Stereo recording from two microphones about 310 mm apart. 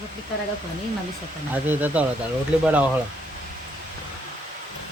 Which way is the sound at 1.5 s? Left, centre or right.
Centre.